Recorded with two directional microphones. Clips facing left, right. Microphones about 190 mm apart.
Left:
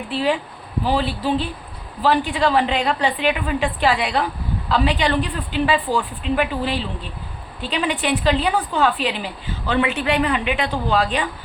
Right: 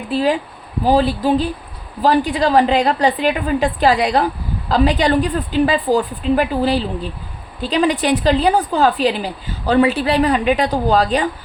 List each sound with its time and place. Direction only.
0.1 s a woman's voice: 40° right (ahead or behind)